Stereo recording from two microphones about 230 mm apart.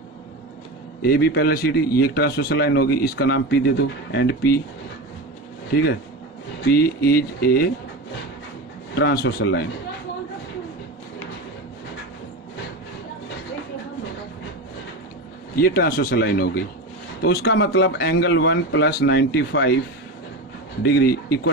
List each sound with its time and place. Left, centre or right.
1.0 s a man's voice: left
6.7 s a man's voice: left
8.9 s a man's voice: left
15.6 s a man's voice: left
20.8 s a man's voice: left